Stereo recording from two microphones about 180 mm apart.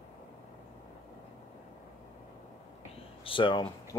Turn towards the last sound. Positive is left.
turn(degrees=25)  # may be behind; listen again after turning